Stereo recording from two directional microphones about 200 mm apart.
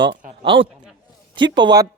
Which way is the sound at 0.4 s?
25° right (ahead or behind).